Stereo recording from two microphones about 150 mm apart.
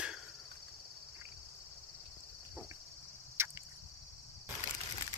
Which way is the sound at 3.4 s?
15° right (ahead or behind).